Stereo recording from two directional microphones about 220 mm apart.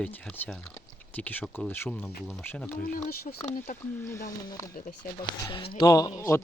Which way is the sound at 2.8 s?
40° left (ahead or behind).